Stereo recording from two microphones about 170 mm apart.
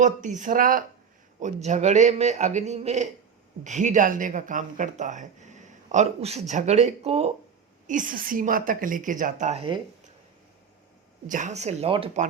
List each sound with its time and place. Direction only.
0.0 s speech: 45° right (ahead or behind)
1.4 s speech: 45° right (ahead or behind)
7.9 s speech: 50° right (ahead or behind)
11.3 s speech: 45° right (ahead or behind)